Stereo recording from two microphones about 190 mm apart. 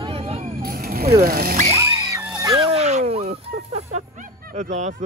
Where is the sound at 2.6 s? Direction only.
35° right (ahead or behind).